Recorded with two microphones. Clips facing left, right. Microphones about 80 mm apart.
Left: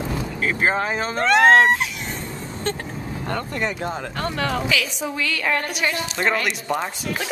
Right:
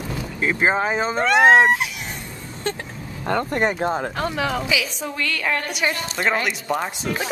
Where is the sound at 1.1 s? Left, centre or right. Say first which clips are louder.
Even; centre.